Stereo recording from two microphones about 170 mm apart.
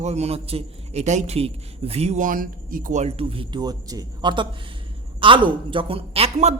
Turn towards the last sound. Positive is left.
turn(degrees=-40)  # may be behind; listen again after turning